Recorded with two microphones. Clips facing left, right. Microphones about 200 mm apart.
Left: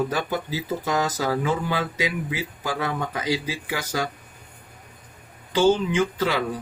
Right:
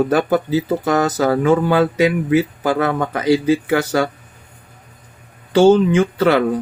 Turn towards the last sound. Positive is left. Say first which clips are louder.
# right 10 dB
turn(degrees=-60)  # may be behind; listen again after turning